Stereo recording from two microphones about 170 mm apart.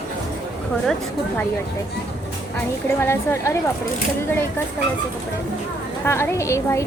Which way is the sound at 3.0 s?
15° left (ahead or behind).